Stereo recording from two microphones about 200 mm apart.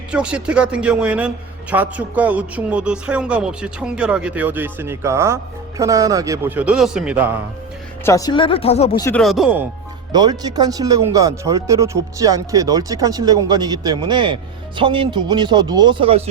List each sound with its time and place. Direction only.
0.1 s a man's voice: 5° right (ahead or behind)
8.0 s speech: 15° left (ahead or behind)
9.0 s speech: 15° left (ahead or behind)
9.2 s speech: centre (ahead or behind)
10.1 s speech: 20° right (ahead or behind)